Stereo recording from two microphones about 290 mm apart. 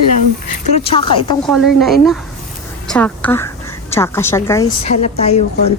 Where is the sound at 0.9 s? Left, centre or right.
Centre.